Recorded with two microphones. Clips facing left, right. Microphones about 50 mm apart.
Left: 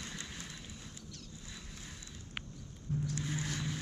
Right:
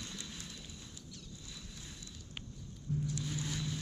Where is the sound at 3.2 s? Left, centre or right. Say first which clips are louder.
Left 2 dB; left.